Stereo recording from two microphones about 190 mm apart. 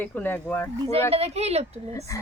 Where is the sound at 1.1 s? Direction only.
35° right (ahead or behind).